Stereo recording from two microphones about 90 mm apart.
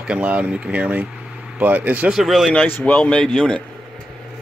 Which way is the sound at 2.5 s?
15° left (ahead or behind).